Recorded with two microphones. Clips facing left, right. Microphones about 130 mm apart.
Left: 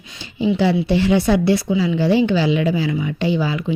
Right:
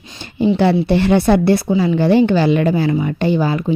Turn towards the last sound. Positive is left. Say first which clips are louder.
# right 3 dB
turn(degrees=-45)  # may be behind; listen again after turning